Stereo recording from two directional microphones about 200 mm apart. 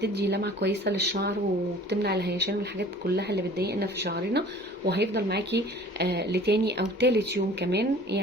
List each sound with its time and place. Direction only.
0.0 s speech: 55° right (ahead or behind)